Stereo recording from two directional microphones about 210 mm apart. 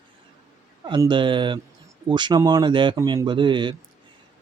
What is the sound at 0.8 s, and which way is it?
Speech, 20° right (ahead or behind).